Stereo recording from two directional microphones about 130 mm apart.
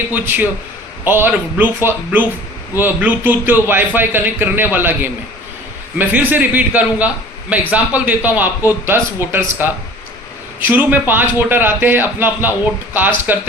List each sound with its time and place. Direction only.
0.1 s a man's voice: 15° right (ahead or behind)